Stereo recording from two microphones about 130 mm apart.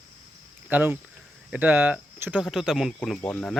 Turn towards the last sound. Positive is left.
turn(degrees=10)  # may be behind; listen again after turning